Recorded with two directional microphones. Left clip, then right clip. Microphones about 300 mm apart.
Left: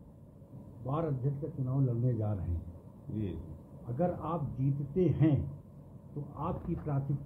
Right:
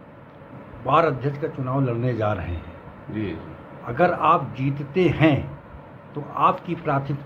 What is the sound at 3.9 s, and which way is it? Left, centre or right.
Speech, right.